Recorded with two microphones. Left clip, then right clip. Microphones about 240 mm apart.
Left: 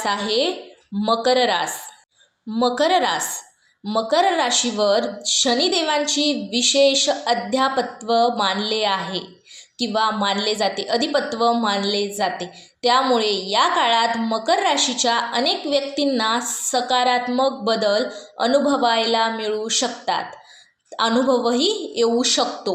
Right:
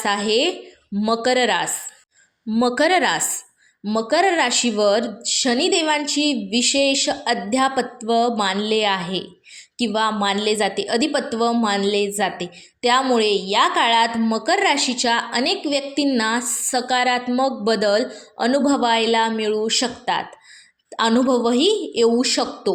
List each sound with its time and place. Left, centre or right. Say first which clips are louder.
0.0 s a woman's voice: right 1 dB; right